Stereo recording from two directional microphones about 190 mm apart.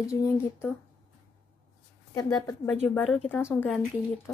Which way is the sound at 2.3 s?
5° left (ahead or behind).